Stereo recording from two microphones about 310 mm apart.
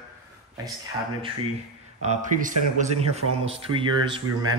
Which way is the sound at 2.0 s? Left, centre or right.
Right.